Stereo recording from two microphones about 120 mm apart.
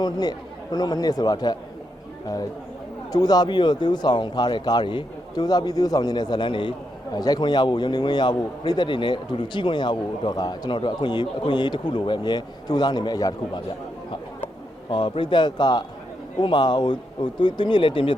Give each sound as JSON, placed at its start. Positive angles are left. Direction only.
{"t": 0.0, "sound": "speech", "side_deg": 35}
{"t": 3.1, "sound": "speech", "side_deg": 35}
{"t": 14.8, "sound": "speech", "side_deg": 45}